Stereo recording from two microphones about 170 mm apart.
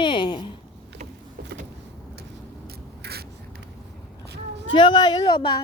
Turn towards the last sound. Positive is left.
turn(degrees=30)  # may be behind; listen again after turning